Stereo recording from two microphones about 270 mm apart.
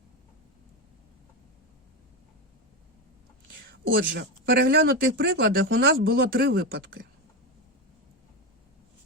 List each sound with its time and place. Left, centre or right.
3.7 s speech: right